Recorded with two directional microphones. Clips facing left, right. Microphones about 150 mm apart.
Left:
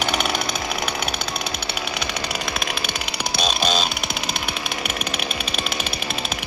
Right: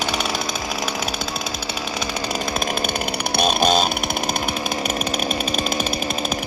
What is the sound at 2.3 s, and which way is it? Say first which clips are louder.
Chainsaw: right 4 dB; 45° right (ahead or behind).